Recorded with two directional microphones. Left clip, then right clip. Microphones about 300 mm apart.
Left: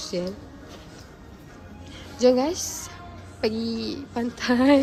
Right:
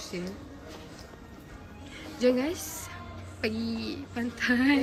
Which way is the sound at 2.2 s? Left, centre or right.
Centre.